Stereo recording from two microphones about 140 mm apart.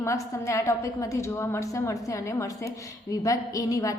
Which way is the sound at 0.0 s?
20° left (ahead or behind).